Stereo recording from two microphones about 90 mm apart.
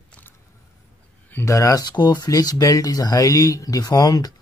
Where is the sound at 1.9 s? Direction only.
50° left (ahead or behind).